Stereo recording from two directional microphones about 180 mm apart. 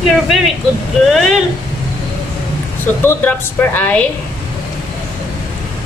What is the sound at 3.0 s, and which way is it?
A woman's voice, 10° left (ahead or behind).